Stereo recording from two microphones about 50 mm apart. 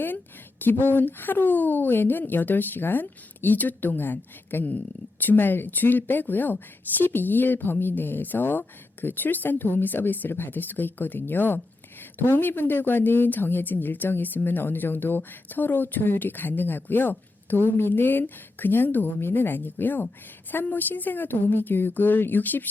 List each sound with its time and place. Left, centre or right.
0.6 s a woman's voice: left